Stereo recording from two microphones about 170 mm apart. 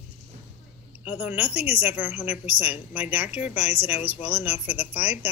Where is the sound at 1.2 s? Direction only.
10° right (ahead or behind).